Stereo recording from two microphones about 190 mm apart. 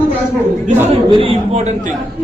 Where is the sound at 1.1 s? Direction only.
30° right (ahead or behind).